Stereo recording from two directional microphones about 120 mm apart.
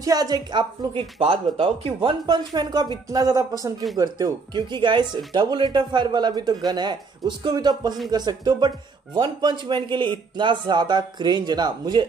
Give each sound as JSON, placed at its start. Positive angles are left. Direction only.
{"t": 0.0, "sound": "speech", "side_deg": -30}
{"t": 1.2, "sound": "speech", "side_deg": -50}